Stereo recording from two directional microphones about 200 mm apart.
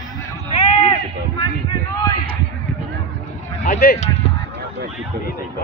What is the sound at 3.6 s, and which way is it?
Speech, 50° left (ahead or behind).